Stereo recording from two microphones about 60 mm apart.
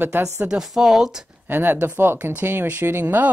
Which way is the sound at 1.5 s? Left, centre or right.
Right.